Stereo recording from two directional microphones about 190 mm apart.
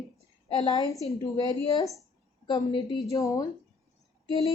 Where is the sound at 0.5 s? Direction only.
20° left (ahead or behind).